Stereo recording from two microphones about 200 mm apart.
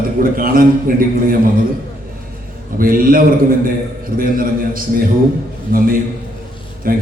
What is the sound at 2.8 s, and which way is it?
A man's voice, 45° right (ahead or behind).